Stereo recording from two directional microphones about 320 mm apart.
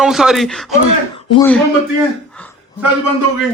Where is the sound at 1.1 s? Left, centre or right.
Centre.